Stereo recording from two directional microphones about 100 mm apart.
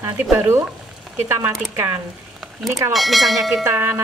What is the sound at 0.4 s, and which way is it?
Speech, 25° right (ahead or behind).